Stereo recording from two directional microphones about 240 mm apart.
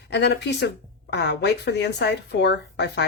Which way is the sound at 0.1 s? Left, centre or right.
Left.